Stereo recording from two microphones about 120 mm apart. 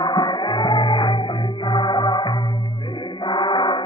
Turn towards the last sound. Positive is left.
turn(degrees=40)  # may be behind; listen again after turning